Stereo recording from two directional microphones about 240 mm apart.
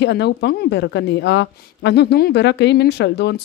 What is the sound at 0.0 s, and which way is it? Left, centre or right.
A woman's voice, left.